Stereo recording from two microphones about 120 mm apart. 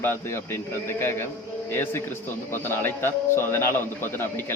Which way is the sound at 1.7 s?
20° left (ahead or behind).